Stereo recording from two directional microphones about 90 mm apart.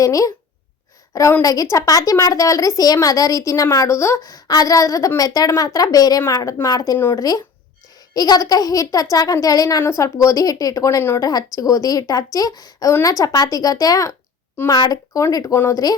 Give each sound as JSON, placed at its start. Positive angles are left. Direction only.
{"t": 0.0, "sound": "speech", "side_deg": 40}
{"t": 1.4, "sound": "a woman's voice", "side_deg": 40}